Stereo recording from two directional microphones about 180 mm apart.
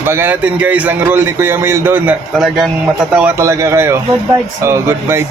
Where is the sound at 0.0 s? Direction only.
10° right (ahead or behind).